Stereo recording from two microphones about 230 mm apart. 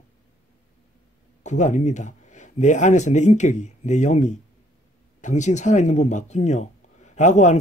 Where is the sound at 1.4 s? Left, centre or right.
Left.